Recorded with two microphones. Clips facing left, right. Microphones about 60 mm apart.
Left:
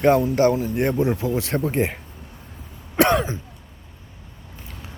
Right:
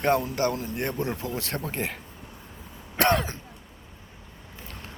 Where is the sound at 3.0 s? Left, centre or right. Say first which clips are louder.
Left 5 dB; centre.